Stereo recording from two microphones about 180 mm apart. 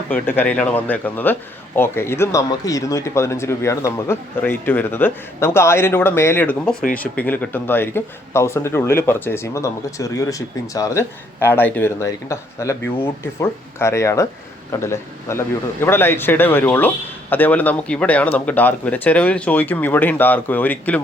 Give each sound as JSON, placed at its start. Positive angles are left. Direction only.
{"t": 0.1, "sound": "speech", "side_deg": 10}